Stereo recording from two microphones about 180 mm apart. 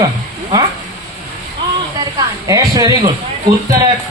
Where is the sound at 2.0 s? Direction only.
20° right (ahead or behind).